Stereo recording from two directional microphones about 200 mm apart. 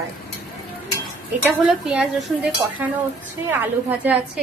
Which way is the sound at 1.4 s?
5° right (ahead or behind).